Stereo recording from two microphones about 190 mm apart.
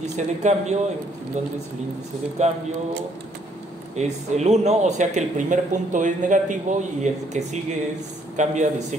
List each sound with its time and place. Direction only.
0.0 s speech: 35° right (ahead or behind)
2.4 s speech: 40° right (ahead or behind)
3.9 s speech: 35° right (ahead or behind)